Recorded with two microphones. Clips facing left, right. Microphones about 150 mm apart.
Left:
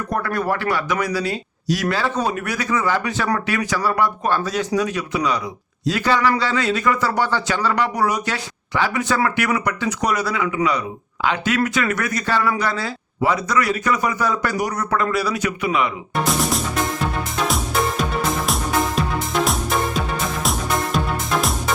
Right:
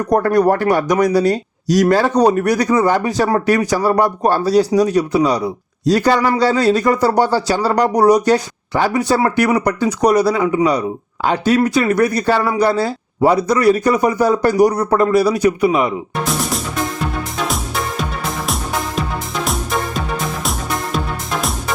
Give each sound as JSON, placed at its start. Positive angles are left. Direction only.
{"t": 0.1, "sound": "speech", "side_deg": -40}
{"t": 16.2, "sound": "music", "side_deg": 0}
{"t": 18.4, "sound": "music", "side_deg": 0}